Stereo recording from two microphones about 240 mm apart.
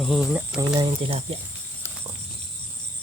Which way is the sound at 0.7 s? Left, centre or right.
Centre.